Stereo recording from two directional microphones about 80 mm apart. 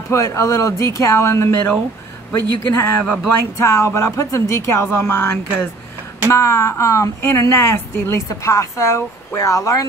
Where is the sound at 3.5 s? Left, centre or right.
Left.